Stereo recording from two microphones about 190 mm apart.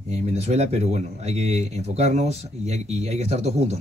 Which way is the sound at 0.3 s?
35° right (ahead or behind).